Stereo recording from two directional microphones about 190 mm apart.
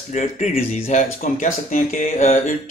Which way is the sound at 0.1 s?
40° left (ahead or behind).